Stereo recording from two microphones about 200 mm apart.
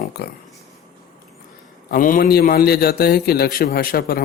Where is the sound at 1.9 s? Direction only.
45° left (ahead or behind).